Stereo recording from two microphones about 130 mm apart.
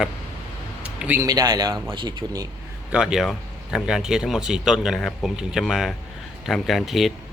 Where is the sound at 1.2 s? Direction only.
30° right (ahead or behind).